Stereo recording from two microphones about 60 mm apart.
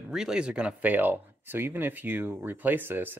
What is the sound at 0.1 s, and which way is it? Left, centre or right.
Speech, centre.